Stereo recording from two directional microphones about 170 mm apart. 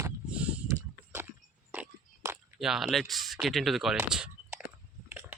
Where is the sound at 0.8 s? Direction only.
15° right (ahead or behind).